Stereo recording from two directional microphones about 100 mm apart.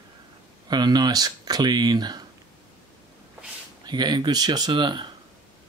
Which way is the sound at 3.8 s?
45° right (ahead or behind).